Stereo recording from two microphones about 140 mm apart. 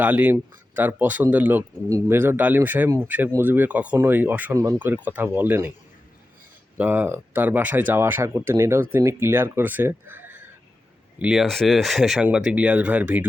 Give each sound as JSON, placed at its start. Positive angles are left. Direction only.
{"t": 0.0, "sound": "speech", "side_deg": -10}
{"t": 6.7, "sound": "speech", "side_deg": -10}